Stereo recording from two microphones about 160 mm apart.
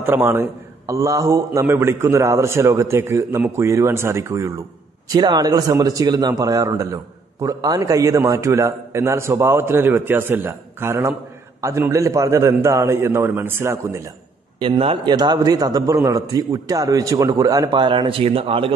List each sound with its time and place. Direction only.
0.0 s a man's voice: 10° right (ahead or behind)
14.6 s a man's voice: 35° right (ahead or behind)